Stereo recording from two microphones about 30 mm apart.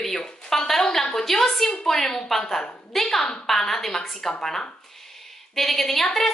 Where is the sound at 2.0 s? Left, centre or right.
Left.